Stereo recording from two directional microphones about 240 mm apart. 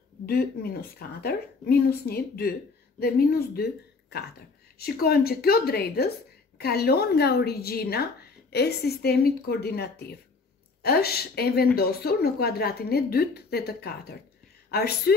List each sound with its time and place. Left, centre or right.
0.3 s a woman's voice: left